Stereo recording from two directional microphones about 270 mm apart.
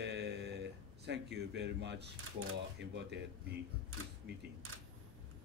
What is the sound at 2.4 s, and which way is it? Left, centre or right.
Speech, right.